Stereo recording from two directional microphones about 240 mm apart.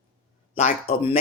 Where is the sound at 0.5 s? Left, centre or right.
Left.